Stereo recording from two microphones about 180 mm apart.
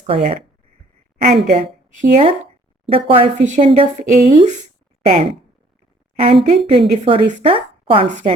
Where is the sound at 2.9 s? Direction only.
30° right (ahead or behind).